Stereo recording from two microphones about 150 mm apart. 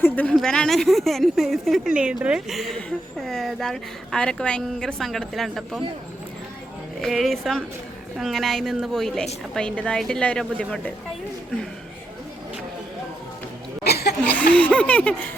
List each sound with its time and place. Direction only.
0.0 s a woman's voice: 10° left (ahead or behind)
7.0 s a woman's voice: centre (ahead or behind)
13.8 s a sound: 90° left
14.3 s a woman's voice: 10° left (ahead or behind)